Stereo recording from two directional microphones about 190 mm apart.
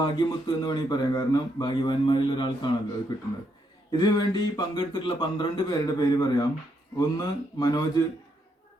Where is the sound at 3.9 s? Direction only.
20° left (ahead or behind).